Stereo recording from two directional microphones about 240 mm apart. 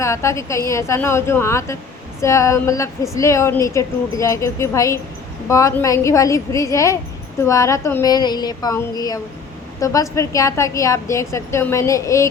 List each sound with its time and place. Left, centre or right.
0.0 s a woman's voice: centre